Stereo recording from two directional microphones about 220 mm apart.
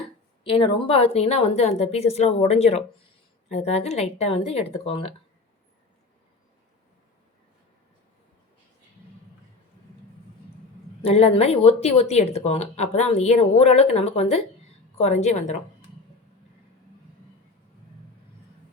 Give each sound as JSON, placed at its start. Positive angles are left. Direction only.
{"t": 0.4, "sound": "speech", "side_deg": 25}
{"t": 11.0, "sound": "a woman's voice", "side_deg": 25}